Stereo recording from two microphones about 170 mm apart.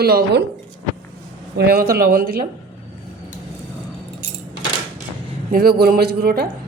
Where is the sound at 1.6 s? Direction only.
65° right (ahead or behind).